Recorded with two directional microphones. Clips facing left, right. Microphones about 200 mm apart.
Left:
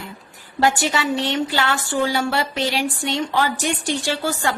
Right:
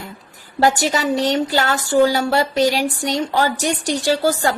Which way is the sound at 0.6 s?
40° right (ahead or behind).